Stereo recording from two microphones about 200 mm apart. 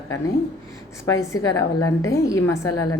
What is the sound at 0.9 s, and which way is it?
A woman's voice, 15° left (ahead or behind).